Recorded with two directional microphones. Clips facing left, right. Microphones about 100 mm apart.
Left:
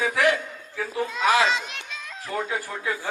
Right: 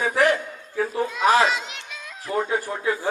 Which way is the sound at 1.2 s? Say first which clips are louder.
Right 3 dB; 40° right (ahead or behind).